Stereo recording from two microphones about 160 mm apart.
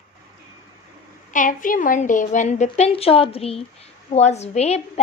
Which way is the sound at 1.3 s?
55° left (ahead or behind).